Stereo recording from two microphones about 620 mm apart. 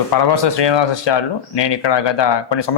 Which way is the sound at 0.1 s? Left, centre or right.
Left.